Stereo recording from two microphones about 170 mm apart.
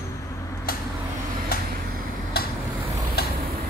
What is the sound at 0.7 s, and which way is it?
Vehicle, 60° left (ahead or behind).